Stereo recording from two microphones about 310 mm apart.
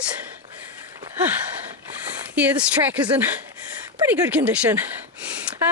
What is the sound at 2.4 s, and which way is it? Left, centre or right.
Speech, centre.